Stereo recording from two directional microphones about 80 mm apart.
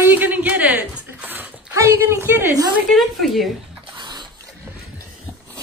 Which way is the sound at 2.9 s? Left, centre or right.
Centre.